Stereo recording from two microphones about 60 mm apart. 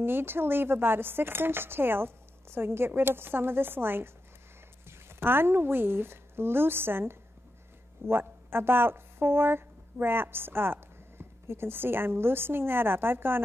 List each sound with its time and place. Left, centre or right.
0.0 s a woman's voice: right